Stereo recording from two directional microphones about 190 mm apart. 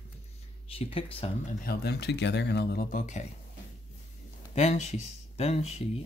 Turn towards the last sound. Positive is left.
turn(degrees=30)  # may be behind; listen again after turning